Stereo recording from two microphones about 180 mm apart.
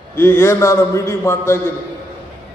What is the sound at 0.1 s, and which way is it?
A man's voice, 10° left (ahead or behind).